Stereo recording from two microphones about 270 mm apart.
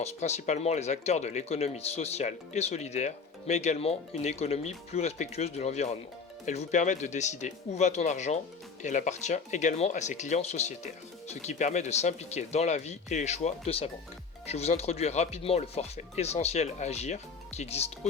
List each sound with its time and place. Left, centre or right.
0.0 s speech: left